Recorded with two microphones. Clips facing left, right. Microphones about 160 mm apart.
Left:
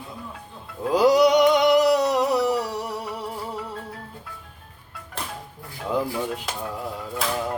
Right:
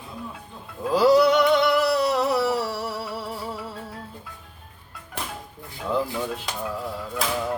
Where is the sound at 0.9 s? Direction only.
15° left (ahead or behind).